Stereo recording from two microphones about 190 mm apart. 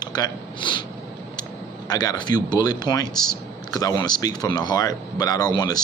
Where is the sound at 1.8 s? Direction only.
20° left (ahead or behind).